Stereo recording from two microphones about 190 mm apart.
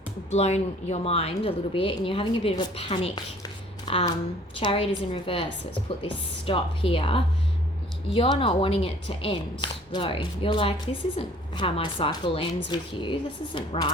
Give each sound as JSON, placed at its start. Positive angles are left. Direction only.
{"t": 0.3, "sound": "a woman's voice", "side_deg": 35}